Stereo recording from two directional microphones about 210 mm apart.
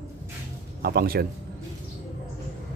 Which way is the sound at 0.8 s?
50° right (ahead or behind).